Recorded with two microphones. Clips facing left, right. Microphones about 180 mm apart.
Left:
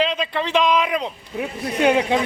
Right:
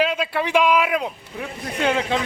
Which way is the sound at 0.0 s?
5° right (ahead or behind).